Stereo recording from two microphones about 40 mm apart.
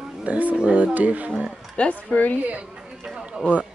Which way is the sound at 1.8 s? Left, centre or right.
Left.